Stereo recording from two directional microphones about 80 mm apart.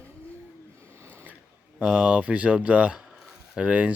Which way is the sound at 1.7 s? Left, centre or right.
Centre.